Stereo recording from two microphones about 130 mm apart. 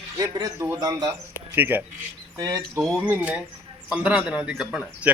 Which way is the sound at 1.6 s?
15° right (ahead or behind).